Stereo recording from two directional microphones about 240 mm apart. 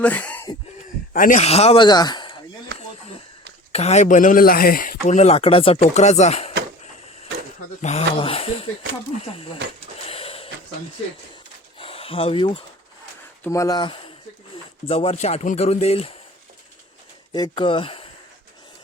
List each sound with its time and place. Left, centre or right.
0.0 s speech: centre
1.1 s speech: left
3.7 s speech: left
7.8 s speech: left
10.1 s a sound: left
11.8 s a sound: left
13.4 s speech: centre
17.3 s speech: centre